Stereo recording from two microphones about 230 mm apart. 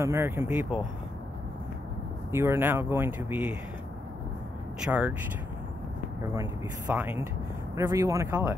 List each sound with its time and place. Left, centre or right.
0.0 s speech: centre
2.3 s speech: centre
4.7 s speech: centre
6.3 s speech: centre